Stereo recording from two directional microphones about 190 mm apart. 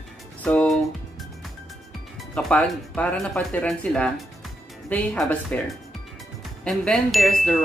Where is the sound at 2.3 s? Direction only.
5° left (ahead or behind).